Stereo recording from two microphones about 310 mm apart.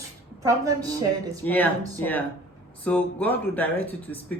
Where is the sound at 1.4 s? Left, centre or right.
Centre.